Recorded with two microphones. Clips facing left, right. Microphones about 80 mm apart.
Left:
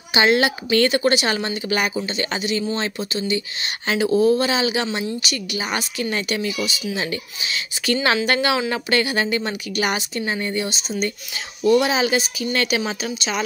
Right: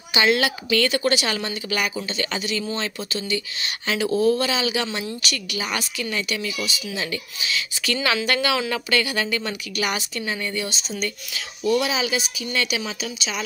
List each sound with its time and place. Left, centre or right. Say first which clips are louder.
0.1 s speech: left 3 dB; left
3.0 s speech: left 3 dB; centre
5.9 s speech: left 3 dB; left; by 11.1 s centre
11.3 s speech: left 5 dB; left